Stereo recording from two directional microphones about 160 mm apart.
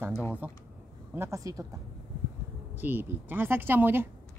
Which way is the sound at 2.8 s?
10° right (ahead or behind).